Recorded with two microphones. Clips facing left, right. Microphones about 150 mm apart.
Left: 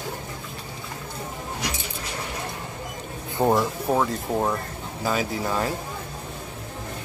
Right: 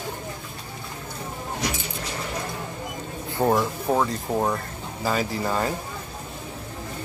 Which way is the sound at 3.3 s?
10° left (ahead or behind).